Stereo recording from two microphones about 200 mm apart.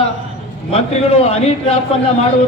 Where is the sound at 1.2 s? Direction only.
30° left (ahead or behind).